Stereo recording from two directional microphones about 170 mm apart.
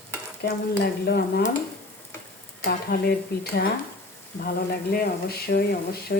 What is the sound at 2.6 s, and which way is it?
Speech, 70° left (ahead or behind).